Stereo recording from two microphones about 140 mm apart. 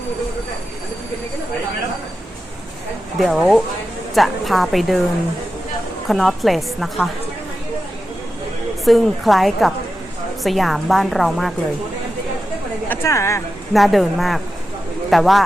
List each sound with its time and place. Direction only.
3.2 s a woman's voice: centre (ahead or behind)
6.1 s a woman's voice: centre (ahead or behind)
8.8 s a woman's voice: centre (ahead or behind)
12.9 s a woman's voice: 20° left (ahead or behind)
13.7 s a woman's voice: centre (ahead or behind)